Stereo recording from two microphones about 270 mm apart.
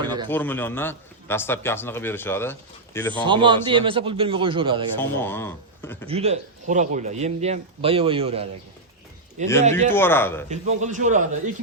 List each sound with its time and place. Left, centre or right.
0.3 s a man's voice: centre
3.2 s speech: centre
4.9 s a man's voice: centre
6.1 s speech: right
9.9 s a man's voice: centre
10.5 s speech: right